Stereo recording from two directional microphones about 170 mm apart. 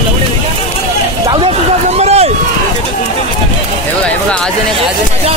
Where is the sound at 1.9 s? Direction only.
40° right (ahead or behind).